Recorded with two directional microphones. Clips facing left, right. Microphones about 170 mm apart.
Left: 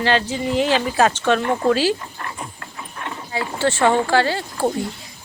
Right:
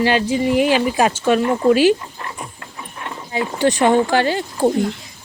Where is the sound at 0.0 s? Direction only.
10° right (ahead or behind).